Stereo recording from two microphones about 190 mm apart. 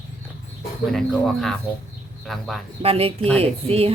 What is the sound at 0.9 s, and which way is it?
Speech, 5° left (ahead or behind).